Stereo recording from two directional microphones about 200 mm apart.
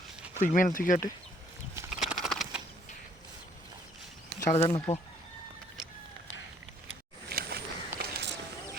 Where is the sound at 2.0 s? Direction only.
Centre (ahead or behind).